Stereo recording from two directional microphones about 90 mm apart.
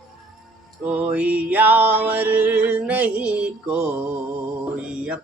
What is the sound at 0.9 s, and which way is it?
Music, 15° right (ahead or behind).